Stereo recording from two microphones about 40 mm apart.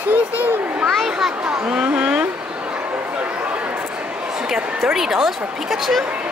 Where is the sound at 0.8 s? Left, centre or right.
Centre.